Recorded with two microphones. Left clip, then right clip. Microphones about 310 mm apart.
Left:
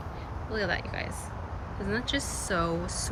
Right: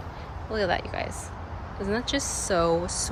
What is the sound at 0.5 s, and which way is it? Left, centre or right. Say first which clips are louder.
Speech: right 4 dB; centre.